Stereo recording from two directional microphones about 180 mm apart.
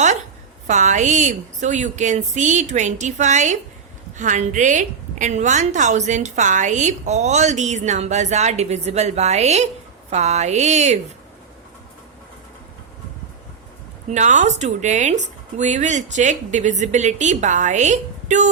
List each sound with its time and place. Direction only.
0.7 s a woman's voice: 40° right (ahead or behind)
14.1 s a woman's voice: 40° right (ahead or behind)